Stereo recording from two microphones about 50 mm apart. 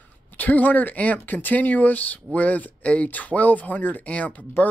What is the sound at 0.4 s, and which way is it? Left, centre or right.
Speech, left.